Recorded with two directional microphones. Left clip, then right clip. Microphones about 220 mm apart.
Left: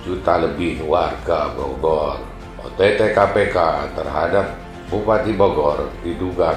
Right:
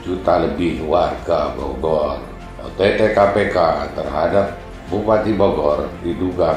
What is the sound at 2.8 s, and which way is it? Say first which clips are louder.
Speech: right 1 dB; 20° left (ahead or behind).